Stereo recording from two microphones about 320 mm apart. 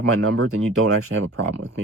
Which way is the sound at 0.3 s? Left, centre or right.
Right.